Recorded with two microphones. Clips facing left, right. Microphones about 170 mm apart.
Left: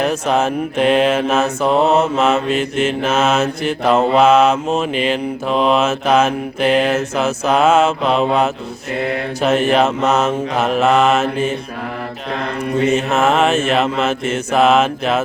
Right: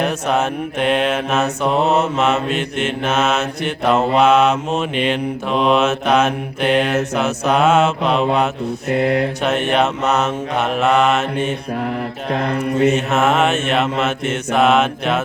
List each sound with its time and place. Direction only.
0.0 s mantra: centre (ahead or behind)
12.3 s mantra: 50° right (ahead or behind)
12.8 s mantra: centre (ahead or behind)